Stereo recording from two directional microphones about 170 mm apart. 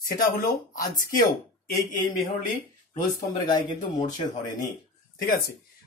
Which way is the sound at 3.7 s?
50° left (ahead or behind).